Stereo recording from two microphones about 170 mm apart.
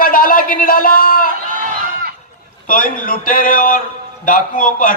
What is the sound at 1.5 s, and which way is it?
Run, 60° right (ahead or behind).